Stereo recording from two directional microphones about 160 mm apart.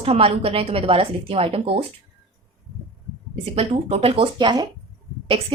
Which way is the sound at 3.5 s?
35° right (ahead or behind).